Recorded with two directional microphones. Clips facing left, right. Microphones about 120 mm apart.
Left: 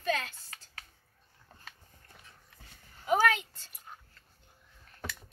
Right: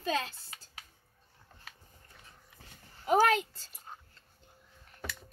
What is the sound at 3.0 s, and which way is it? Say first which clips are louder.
Speech: right 2 dB; 40° right (ahead or behind).